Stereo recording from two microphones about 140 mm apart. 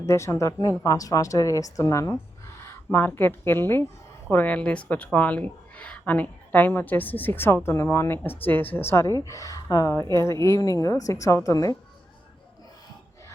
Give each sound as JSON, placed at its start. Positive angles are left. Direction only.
{"t": 0.0, "sound": "speech", "side_deg": 20}
{"t": 2.6, "sound": "a sound", "side_deg": 15}
{"t": 3.1, "sound": "speech", "side_deg": 15}